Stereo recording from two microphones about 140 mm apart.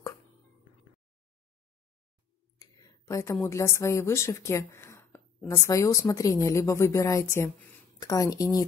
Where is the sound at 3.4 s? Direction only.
20° left (ahead or behind).